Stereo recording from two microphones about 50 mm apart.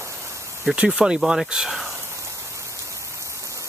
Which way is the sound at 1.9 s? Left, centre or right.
Right.